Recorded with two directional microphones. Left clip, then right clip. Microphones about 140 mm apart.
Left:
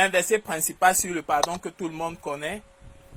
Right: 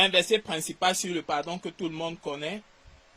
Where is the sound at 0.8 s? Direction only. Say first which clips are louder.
Left 6 dB; centre (ahead or behind).